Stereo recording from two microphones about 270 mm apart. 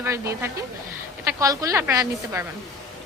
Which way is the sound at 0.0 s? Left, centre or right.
Centre.